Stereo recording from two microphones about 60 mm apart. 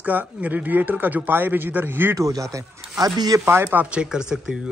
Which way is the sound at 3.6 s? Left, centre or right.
Right.